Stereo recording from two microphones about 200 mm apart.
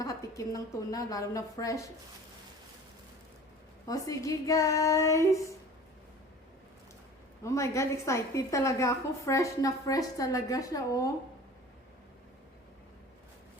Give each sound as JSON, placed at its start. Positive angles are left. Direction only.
{"t": 0.0, "sound": "a woman's voice", "side_deg": 15}
{"t": 3.8, "sound": "a woman's voice", "side_deg": 15}
{"t": 7.4, "sound": "a woman's voice", "side_deg": 15}